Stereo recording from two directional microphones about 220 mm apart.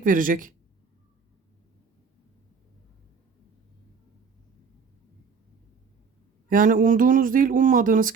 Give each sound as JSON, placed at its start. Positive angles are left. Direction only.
{"t": 0.0, "sound": "speech", "side_deg": -35}
{"t": 6.5, "sound": "speech", "side_deg": -40}